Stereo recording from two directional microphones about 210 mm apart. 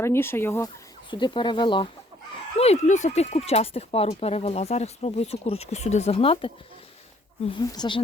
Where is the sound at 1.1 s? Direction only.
20° left (ahead or behind).